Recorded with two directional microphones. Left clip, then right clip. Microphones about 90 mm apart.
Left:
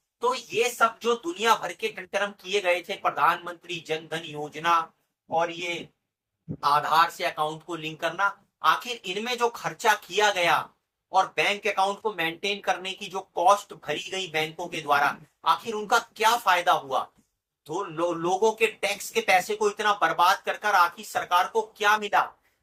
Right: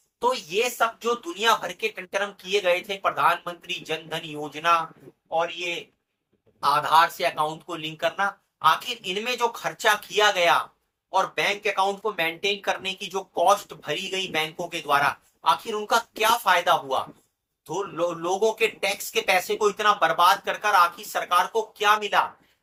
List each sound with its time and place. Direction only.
0.2 s speech: 25° right (ahead or behind)
0.8 s speech: 10° right (ahead or behind); by 4.2 s 30° right (ahead or behind)
6.6 s speech: 25° right (ahead or behind)